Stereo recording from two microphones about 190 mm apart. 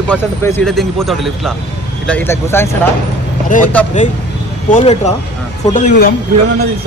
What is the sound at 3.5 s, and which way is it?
Speech, 45° left (ahead or behind).